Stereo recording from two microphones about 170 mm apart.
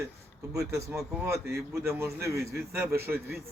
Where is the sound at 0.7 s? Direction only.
20° right (ahead or behind).